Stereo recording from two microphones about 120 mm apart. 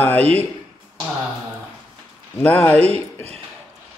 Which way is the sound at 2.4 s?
15° left (ahead or behind).